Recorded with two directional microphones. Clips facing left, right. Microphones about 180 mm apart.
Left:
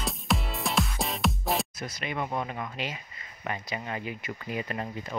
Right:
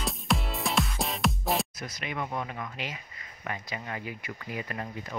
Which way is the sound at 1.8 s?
30° left (ahead or behind).